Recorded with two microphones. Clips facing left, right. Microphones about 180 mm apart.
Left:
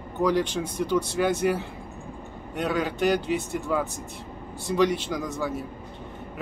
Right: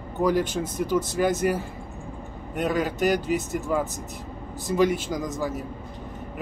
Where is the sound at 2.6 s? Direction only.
45° right (ahead or behind).